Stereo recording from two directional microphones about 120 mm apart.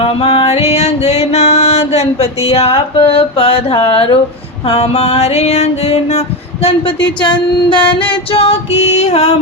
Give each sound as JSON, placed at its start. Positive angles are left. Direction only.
{"t": 0.0, "sound": "music", "side_deg": 50}
{"t": 4.6, "sound": "music", "side_deg": 60}
{"t": 7.2, "sound": "music", "side_deg": 40}
{"t": 8.1, "sound": "music", "side_deg": 55}